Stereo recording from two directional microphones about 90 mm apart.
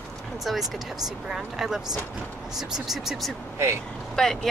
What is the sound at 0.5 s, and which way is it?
Speech, centre (ahead or behind).